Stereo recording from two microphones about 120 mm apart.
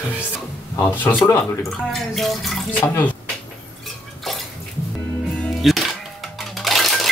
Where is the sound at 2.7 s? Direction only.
15° left (ahead or behind).